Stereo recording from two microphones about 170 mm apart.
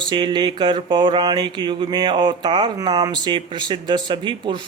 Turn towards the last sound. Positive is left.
turn(degrees=-30)  # may be behind; listen again after turning